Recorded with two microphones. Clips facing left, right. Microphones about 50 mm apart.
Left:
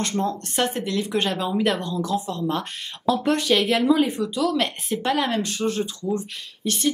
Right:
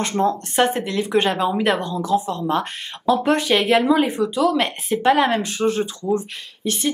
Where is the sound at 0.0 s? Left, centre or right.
Centre.